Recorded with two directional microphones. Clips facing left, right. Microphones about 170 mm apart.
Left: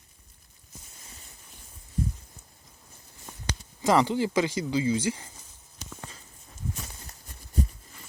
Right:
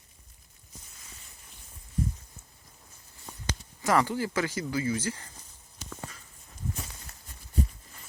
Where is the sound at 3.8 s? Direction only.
20° left (ahead or behind).